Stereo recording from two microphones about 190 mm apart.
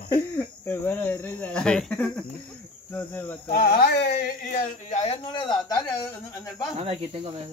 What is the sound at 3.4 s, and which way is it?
Speech, 50° left (ahead or behind).